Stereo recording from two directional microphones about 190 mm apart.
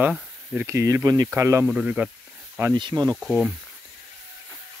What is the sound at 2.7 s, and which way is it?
Speech, 25° right (ahead or behind).